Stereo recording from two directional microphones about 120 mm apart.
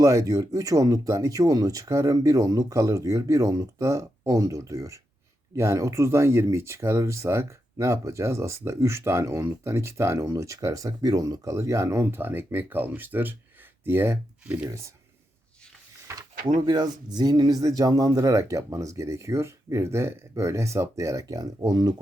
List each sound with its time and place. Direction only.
0.0 s speech: 30° right (ahead or behind)
16.1 s a sound: 25° right (ahead or behind)
16.6 s speech: 35° right (ahead or behind)